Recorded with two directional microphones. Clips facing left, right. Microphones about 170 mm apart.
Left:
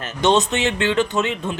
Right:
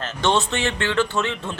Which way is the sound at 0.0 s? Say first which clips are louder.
Left 4 dB; 20° left (ahead or behind).